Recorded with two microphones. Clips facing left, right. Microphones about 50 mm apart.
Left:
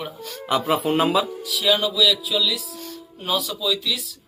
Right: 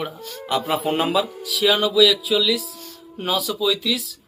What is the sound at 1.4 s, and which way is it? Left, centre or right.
Speech, right.